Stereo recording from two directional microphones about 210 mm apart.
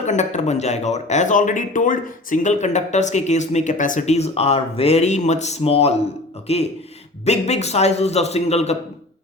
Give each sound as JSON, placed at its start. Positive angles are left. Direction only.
{"t": 0.0, "sound": "speech", "side_deg": 35}